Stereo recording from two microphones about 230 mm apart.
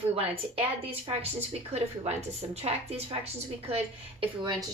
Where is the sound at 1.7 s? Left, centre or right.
Right.